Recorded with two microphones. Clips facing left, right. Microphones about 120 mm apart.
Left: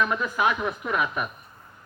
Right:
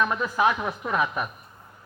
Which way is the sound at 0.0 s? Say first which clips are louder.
Right 1 dB; 30° right (ahead or behind).